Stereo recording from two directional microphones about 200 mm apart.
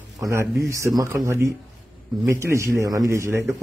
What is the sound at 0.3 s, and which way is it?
Speech, 15° right (ahead or behind).